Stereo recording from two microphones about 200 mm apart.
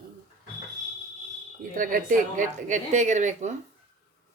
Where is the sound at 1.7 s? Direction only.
45° right (ahead or behind).